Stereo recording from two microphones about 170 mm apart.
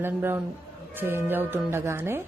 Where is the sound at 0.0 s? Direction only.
15° right (ahead or behind).